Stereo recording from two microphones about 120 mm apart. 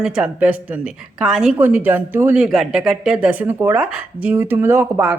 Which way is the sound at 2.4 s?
5° right (ahead or behind).